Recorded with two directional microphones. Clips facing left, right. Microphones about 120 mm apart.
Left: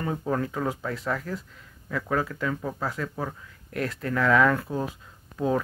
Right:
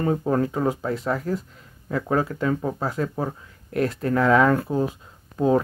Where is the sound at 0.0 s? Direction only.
35° right (ahead or behind).